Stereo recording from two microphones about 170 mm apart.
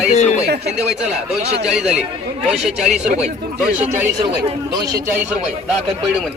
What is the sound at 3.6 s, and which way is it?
Speech, 10° right (ahead or behind).